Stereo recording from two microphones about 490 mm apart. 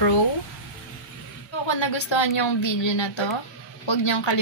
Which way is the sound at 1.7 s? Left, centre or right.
Left.